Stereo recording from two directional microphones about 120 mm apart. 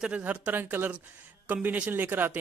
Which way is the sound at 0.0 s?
10° right (ahead or behind).